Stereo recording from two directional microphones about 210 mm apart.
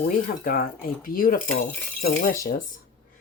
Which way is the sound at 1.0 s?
40° left (ahead or behind).